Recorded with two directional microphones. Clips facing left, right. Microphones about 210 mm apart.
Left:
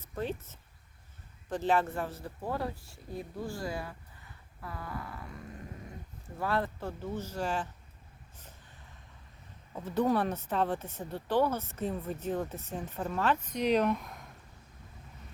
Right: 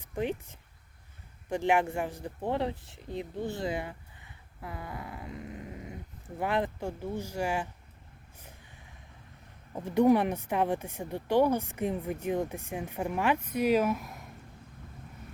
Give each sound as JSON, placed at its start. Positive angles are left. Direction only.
{"t": 0.0, "sound": "speech", "side_deg": -15}
{"t": 9.7, "sound": "speech", "side_deg": -15}